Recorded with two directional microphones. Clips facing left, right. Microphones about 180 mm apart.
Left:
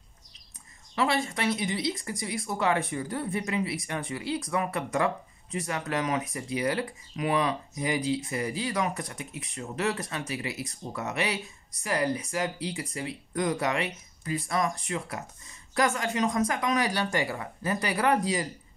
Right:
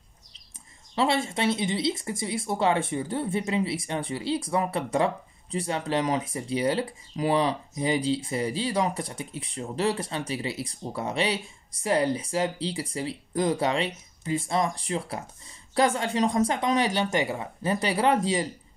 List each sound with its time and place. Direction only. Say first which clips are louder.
0.9 s speech: right 2 dB; 25° right (ahead or behind)